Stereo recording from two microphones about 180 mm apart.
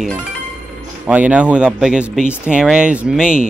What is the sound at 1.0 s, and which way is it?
Speech, 5° right (ahead or behind).